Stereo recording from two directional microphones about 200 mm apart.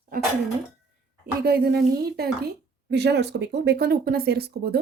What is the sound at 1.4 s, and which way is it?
Speech, 50° right (ahead or behind).